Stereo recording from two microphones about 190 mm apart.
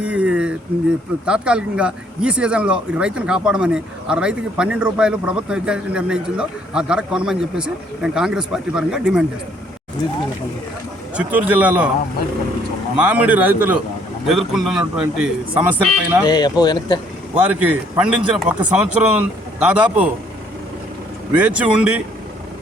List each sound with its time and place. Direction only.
0.0 s a sound: 5° right (ahead or behind)
1.2 s speech: 5° right (ahead or behind)
11.2 s speech: 10° right (ahead or behind)
13.0 s speech: 5° right (ahead or behind)
16.2 s speech: 20° left (ahead or behind)
17.3 s a man's voice: 10° right (ahead or behind)
21.3 s speech: 5° right (ahead or behind)